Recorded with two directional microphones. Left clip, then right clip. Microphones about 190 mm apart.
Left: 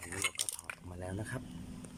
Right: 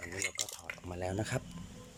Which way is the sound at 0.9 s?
5° right (ahead or behind).